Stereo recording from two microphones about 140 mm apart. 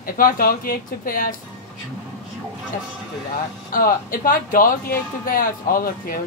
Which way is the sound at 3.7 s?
85° left.